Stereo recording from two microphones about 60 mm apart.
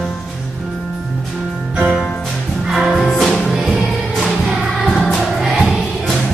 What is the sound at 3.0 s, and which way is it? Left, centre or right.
Music, centre.